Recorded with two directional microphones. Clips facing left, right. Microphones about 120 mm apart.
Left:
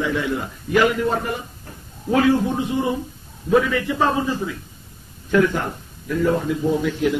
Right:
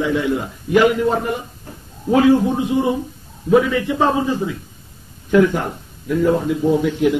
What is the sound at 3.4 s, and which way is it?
A man's voice, 20° right (ahead or behind).